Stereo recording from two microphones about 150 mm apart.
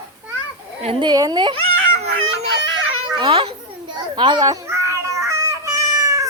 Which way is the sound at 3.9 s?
30° right (ahead or behind).